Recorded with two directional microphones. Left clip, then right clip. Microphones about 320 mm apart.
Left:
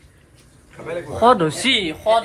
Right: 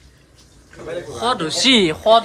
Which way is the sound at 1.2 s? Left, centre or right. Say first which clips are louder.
Left 6 dB; centre.